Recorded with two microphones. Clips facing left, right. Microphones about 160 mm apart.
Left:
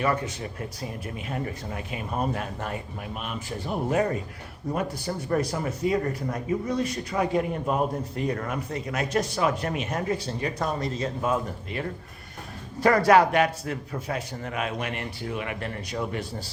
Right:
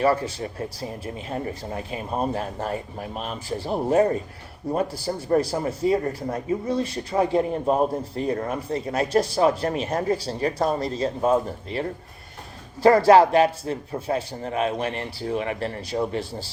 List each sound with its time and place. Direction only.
0.0 s speech: 30° right (ahead or behind)